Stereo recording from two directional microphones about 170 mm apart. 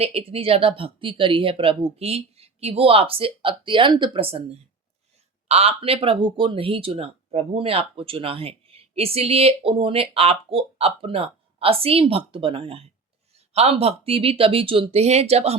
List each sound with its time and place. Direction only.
0.0 s speech: 35° right (ahead or behind)
5.5 s speech: 35° right (ahead or behind)